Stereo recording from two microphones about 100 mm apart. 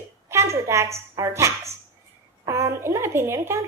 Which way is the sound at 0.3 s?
30° right (ahead or behind).